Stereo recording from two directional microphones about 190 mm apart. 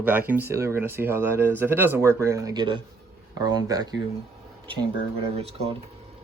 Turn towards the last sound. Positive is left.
turn(degrees=-30)  # may be behind; listen again after turning